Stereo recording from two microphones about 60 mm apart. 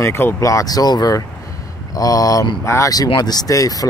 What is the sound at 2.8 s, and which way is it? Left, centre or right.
Speech, left.